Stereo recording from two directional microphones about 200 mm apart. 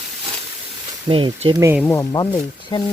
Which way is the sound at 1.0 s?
25° right (ahead or behind).